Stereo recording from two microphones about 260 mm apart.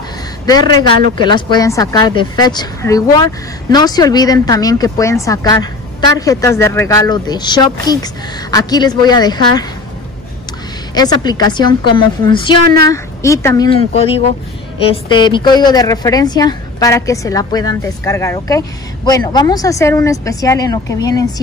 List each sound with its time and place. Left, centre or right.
0.5 s a woman's voice: centre
11.0 s a woman's voice: centre